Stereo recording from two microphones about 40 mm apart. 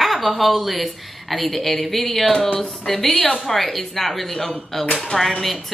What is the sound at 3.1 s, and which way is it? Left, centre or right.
Speech, left.